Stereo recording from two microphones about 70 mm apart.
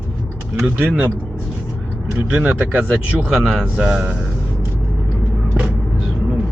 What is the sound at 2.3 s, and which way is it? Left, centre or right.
Speech, right.